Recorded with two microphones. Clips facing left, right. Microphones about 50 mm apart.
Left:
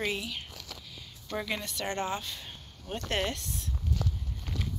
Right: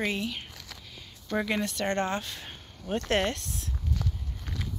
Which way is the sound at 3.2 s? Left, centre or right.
Right.